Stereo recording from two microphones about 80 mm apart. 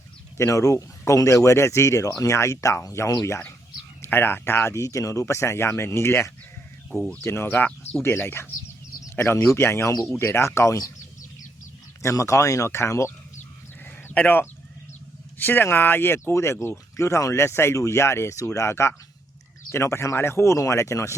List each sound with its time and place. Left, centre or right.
0.3 s speech: left
4.0 s speech: left
9.0 s a sound: left
9.5 s speech: left
12.0 s speech: left
13.8 s a sound: left
15.4 s speech: left